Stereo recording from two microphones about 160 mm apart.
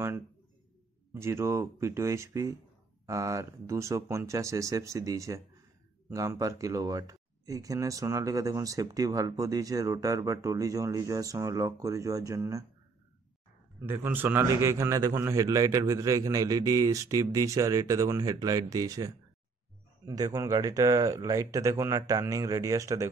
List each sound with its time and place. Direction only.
1.2 s speech: 15° right (ahead or behind)
13.8 s speech: 15° right (ahead or behind)